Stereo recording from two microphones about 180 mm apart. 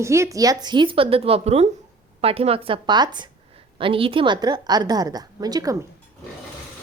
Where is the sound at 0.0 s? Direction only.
15° right (ahead or behind).